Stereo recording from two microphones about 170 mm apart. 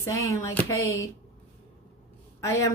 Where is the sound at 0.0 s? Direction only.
20° left (ahead or behind).